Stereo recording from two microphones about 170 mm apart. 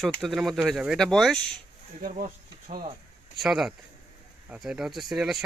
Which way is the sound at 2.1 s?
50° right (ahead or behind).